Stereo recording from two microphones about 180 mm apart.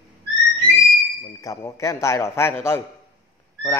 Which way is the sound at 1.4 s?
20° left (ahead or behind).